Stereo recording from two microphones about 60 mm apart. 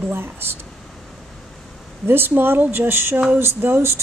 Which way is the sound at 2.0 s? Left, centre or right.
Right.